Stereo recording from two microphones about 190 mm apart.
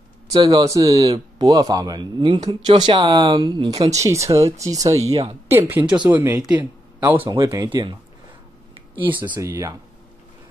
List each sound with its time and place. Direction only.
0.3 s speech: 25° right (ahead or behind)
3.9 s speech: 15° right (ahead or behind)
9.3 s speech: 15° right (ahead or behind)